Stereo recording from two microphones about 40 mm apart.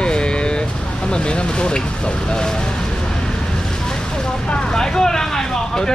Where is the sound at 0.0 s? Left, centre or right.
Left.